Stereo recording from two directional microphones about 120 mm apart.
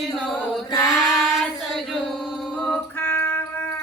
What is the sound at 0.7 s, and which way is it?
Female singing, 30° left (ahead or behind).